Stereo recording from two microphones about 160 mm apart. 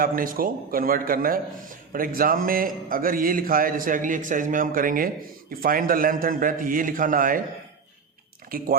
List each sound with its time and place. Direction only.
0.0 s speech: 60° right (ahead or behind)
8.4 s speech: 65° right (ahead or behind)